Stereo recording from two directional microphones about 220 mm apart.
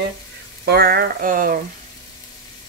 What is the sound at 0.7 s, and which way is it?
Speech, 45° right (ahead or behind).